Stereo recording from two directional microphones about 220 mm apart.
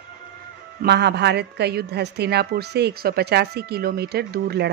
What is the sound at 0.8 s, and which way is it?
A woman's voice, 50° right (ahead or behind).